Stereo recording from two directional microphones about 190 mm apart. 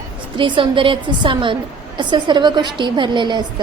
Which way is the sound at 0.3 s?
25° right (ahead or behind).